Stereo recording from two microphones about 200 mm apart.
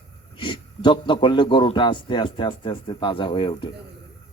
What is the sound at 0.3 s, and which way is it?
Speech, 25° left (ahead or behind).